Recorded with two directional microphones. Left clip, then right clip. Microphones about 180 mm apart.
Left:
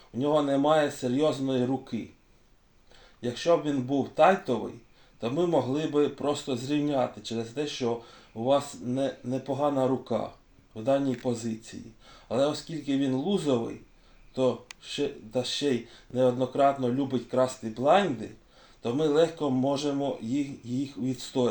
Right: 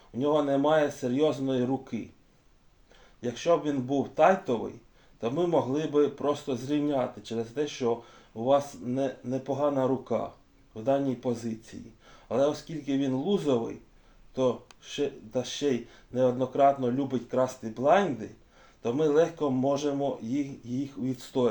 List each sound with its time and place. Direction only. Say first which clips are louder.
0.2 s speech: even; 25° left (ahead or behind)
3.2 s speech: left 1 dB; 20° left (ahead or behind)